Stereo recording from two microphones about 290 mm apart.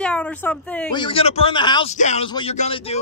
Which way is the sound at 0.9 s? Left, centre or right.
Centre.